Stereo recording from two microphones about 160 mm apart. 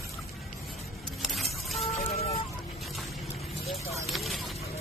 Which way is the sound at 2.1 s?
40° left (ahead or behind).